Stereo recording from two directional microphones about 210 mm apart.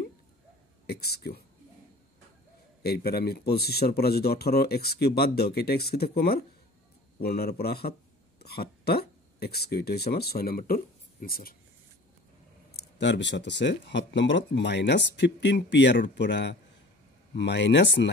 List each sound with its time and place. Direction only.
0.8 s speech: 50° left (ahead or behind)
2.8 s speech: 50° left (ahead or behind)
12.7 s speech: 55° left (ahead or behind)